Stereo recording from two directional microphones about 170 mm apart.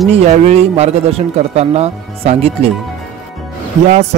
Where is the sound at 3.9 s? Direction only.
40° right (ahead or behind).